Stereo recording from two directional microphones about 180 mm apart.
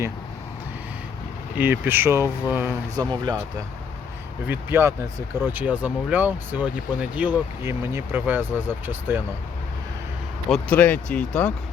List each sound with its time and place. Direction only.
1.5 s speech: 10° right (ahead or behind)
4.4 s speech: 10° right (ahead or behind)
10.5 s speech: 10° left (ahead or behind)